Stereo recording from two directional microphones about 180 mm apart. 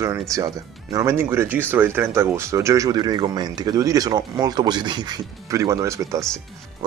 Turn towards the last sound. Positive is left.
turn(degrees=-15)  # may be behind; listen again after turning